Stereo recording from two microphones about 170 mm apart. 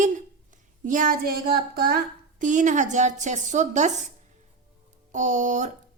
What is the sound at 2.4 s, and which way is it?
A woman's voice, 50° right (ahead or behind).